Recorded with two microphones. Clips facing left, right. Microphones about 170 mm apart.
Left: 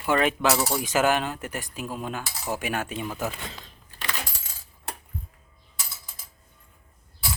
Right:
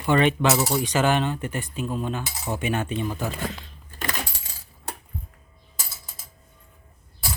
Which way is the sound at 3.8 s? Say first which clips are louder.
Right 4 dB; 45° right (ahead or behind).